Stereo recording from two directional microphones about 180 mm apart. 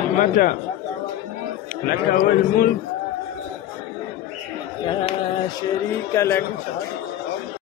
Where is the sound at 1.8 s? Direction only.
50° left (ahead or behind).